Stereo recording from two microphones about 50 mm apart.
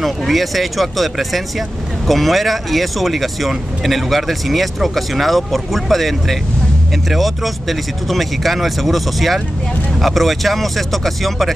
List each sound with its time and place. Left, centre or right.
0.0 s speech: centre